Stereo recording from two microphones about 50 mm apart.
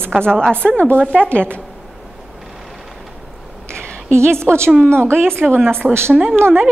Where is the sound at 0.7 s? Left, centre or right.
Left.